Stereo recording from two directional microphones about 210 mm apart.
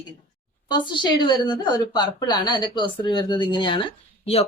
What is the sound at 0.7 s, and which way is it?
A woman's voice, 20° left (ahead or behind).